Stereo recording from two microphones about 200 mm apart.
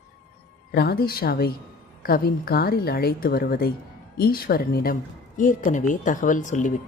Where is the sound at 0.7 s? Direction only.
50° left (ahead or behind).